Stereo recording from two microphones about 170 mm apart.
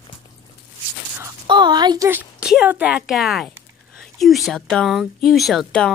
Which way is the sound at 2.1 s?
10° right (ahead or behind).